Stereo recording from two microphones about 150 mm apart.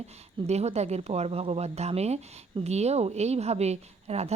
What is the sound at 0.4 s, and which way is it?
A woman's voice, 45° right (ahead or behind).